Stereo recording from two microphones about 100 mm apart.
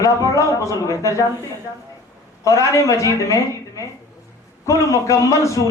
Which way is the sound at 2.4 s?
30° left (ahead or behind).